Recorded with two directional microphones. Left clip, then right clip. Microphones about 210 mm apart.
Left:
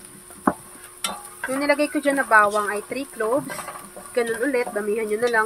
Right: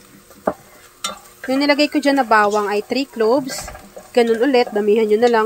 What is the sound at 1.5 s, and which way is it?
A woman's voice, 35° right (ahead or behind).